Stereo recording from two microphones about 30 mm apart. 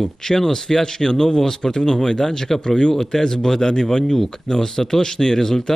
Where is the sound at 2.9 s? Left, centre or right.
Centre.